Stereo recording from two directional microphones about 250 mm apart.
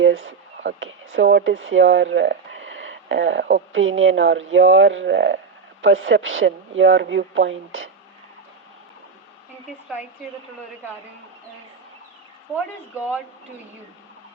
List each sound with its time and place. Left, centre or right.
0.0 s speech: right
13.0 s speech: centre